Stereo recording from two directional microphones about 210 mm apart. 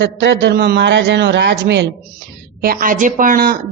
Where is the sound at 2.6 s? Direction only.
45° right (ahead or behind).